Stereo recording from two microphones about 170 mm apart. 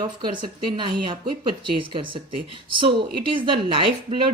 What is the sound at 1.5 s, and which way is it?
Speech, 30° right (ahead or behind).